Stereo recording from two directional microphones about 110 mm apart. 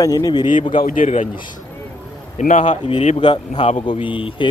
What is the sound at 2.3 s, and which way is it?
Speech, 90° left.